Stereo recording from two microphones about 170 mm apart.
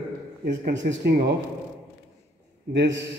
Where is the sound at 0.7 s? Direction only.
70° right (ahead or behind).